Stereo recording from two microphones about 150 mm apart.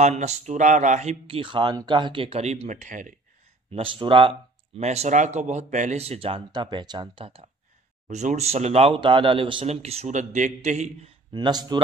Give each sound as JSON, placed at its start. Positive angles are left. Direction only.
{"t": 0.0, "sound": "speech", "side_deg": -50}
{"t": 3.7, "sound": "speech", "side_deg": -35}
{"t": 4.7, "sound": "speech", "side_deg": -45}
{"t": 8.1, "sound": "speech", "side_deg": -50}
{"t": 11.3, "sound": "speech", "side_deg": -30}